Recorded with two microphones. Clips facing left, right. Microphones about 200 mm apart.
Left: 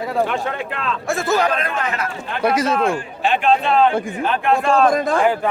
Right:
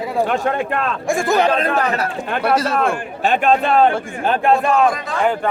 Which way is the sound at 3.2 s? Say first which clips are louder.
Right 1 dB; 45° right (ahead or behind).